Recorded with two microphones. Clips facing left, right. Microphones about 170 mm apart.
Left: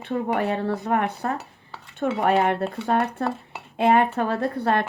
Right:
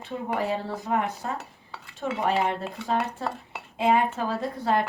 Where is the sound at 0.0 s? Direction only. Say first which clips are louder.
Left 5 dB; 60° left (ahead or behind).